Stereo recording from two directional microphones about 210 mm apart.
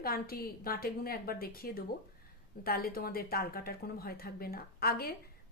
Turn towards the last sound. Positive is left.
turn(degrees=45)  # may be behind; listen again after turning